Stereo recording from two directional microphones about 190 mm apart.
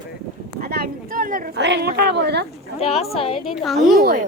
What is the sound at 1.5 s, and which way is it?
Speech, 65° right (ahead or behind).